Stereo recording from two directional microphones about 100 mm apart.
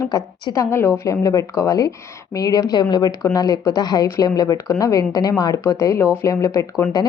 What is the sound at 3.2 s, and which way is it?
A woman's voice, 35° left (ahead or behind).